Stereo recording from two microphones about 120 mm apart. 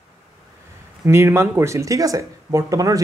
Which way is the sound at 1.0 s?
25° right (ahead or behind).